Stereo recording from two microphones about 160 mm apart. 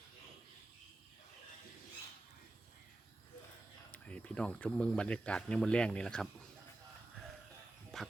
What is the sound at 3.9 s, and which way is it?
Speech, 10° left (ahead or behind).